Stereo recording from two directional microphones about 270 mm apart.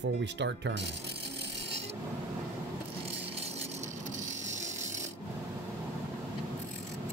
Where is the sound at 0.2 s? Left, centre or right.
Right.